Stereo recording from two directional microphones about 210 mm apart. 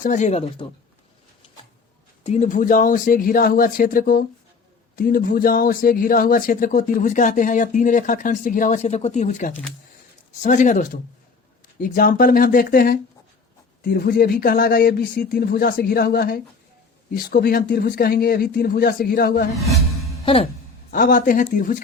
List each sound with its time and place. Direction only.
0.0 s speech: 35° left (ahead or behind)
2.2 s speech: 35° left (ahead or behind)
20.2 s music: 30° left (ahead or behind)
20.9 s speech: 40° left (ahead or behind)